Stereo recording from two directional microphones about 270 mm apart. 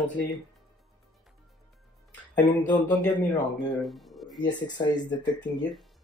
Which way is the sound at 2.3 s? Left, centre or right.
Centre.